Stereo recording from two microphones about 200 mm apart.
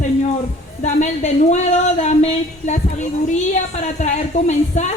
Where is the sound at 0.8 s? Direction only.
35° left (ahead or behind).